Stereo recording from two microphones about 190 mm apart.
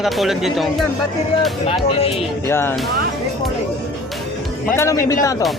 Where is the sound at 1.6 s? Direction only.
30° left (ahead or behind).